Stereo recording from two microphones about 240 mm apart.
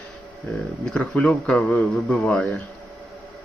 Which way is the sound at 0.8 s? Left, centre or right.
Centre.